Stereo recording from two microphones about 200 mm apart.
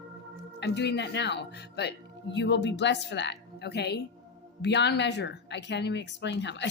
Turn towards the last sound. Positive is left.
turn(degrees=60)  # may be behind; listen again after turning